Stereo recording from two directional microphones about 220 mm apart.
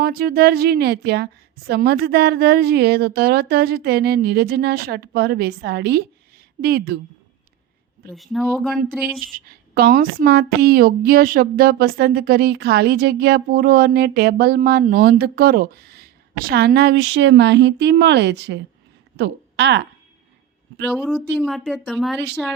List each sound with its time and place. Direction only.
0.0 s a woman's voice: 45° right (ahead or behind)
8.1 s speech: centre (ahead or behind)
9.5 s a woman's voice: 45° right (ahead or behind)
20.9 s speech: centre (ahead or behind)